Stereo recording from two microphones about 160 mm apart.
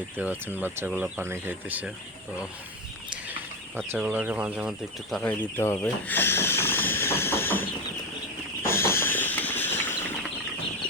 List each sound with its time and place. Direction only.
0.2 s speech: 10° right (ahead or behind)
3.9 s speech: 10° right (ahead or behind)
5.2 s chicken: 15° left (ahead or behind)
8.6 s a sound: 15° left (ahead or behind)